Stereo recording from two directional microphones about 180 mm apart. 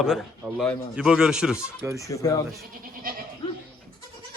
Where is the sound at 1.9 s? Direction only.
15° left (ahead or behind).